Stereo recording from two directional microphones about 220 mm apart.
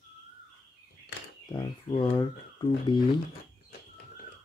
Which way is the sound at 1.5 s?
20° left (ahead or behind).